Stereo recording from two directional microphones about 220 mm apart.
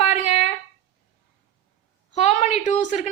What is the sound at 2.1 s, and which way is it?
Speech, 30° left (ahead or behind).